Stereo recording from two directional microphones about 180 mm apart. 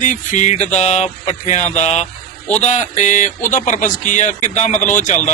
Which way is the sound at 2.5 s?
40° left (ahead or behind).